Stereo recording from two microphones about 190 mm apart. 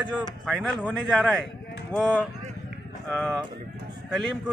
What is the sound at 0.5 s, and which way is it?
Speech, centre (ahead or behind).